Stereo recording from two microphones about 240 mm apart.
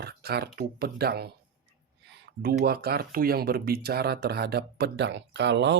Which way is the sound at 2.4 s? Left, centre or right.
Right.